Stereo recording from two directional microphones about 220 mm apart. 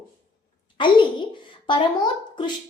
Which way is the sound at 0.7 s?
20° left (ahead or behind).